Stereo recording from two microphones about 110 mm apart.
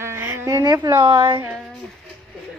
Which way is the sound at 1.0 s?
50° right (ahead or behind).